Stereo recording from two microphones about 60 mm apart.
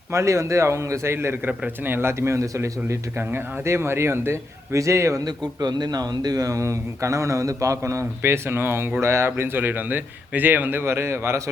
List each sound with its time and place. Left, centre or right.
0.1 s speech: right
1.5 s a man's voice: right
3.2 s a man's voice: right
5.5 s speech: right
9.0 s a man's voice: right
9.4 s a man's voice: right